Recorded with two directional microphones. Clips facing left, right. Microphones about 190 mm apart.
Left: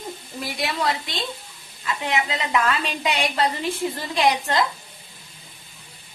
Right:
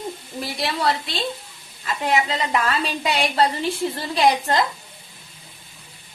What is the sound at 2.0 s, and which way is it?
A woman's voice, 35° right (ahead or behind).